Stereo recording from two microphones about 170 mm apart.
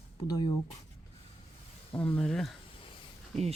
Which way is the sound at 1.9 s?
10° left (ahead or behind).